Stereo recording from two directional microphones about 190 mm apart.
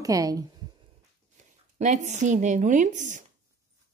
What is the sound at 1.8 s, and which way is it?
Speech, 40° right (ahead or behind).